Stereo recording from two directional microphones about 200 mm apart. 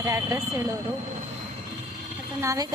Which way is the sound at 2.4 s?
15° right (ahead or behind).